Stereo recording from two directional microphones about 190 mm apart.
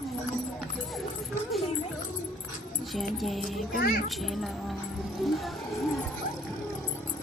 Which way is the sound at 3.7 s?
50° left (ahead or behind).